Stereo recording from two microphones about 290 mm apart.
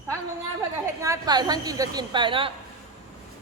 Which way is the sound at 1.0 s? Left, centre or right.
Centre.